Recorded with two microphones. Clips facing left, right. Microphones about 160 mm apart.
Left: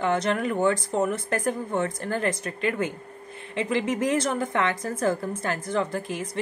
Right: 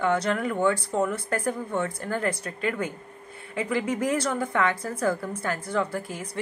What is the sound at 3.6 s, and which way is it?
A woman's voice, 25° left (ahead or behind).